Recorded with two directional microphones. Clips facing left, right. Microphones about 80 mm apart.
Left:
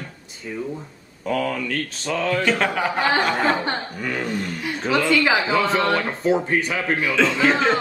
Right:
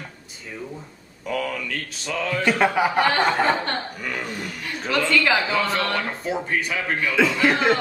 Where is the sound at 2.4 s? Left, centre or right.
Centre.